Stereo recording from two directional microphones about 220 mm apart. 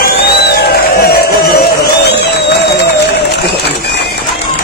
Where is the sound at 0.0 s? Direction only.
45° left (ahead or behind).